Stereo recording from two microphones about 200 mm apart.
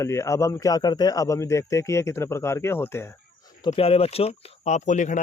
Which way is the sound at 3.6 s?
30° left (ahead or behind).